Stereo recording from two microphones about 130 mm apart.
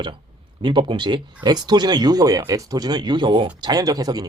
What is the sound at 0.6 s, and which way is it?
Speech, 40° right (ahead or behind).